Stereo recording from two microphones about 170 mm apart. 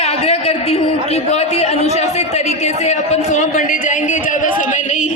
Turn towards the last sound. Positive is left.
turn(degrees=45)  # may be behind; listen again after turning